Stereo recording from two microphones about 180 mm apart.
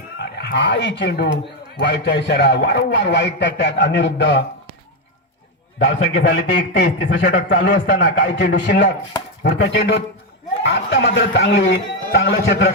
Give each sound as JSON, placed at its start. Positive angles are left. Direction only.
{"t": 0.2, "sound": "a man's voice", "side_deg": 65}
{"t": 6.1, "sound": "a man's voice", "side_deg": 70}